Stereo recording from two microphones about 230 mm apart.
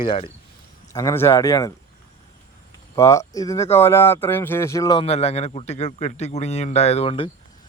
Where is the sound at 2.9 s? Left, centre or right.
Centre.